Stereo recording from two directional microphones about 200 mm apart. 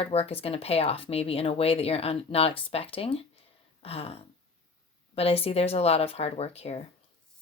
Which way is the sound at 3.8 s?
30° left (ahead or behind).